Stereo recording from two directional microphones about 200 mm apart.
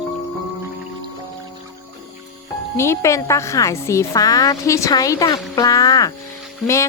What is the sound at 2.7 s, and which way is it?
Speech, 15° left (ahead or behind).